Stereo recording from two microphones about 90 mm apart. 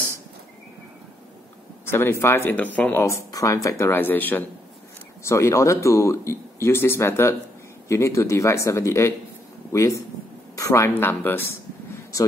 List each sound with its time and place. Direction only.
1.9 s speech: 25° left (ahead or behind)
3.3 s a man's voice: 40° left (ahead or behind); by 4.5 s 20° left (ahead or behind)
5.2 s a man's voice: 35° left (ahead or behind)
11.9 s a sound: 35° left (ahead or behind)